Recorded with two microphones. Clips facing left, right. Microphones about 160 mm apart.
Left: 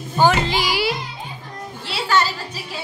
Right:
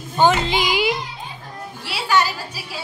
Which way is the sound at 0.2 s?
15° right (ahead or behind).